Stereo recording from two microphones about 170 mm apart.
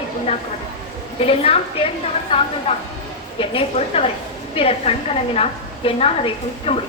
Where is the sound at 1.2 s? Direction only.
35° left (ahead or behind).